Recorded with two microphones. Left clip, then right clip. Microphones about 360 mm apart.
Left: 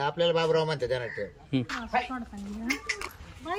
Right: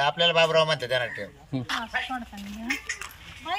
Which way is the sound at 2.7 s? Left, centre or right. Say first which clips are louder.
Right 1 dB; left.